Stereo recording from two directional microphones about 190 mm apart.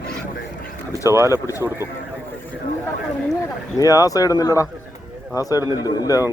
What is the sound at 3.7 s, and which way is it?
Speech, 20° left (ahead or behind).